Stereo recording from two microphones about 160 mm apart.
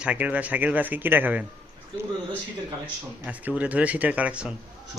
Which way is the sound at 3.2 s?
10° right (ahead or behind).